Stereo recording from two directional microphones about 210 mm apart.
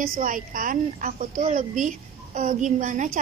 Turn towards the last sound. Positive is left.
turn(degrees=-40)  # may be behind; listen again after turning